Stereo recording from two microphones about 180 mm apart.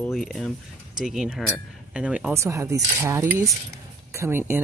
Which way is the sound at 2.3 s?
15° right (ahead or behind).